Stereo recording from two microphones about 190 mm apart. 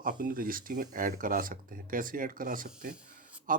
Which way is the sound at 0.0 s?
45° right (ahead or behind).